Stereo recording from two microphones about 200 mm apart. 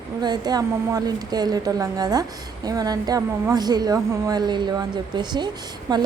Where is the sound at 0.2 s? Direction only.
20° right (ahead or behind).